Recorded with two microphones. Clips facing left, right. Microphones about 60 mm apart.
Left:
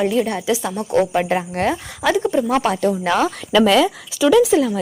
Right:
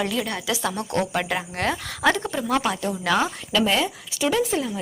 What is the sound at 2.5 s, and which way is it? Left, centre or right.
Speech, left.